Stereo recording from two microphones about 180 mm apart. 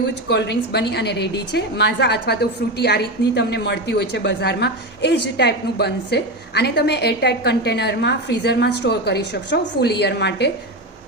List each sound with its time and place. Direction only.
0.3 s a woman's voice: 70° left (ahead or behind)